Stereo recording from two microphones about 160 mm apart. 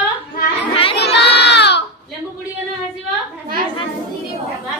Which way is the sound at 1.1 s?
90° left.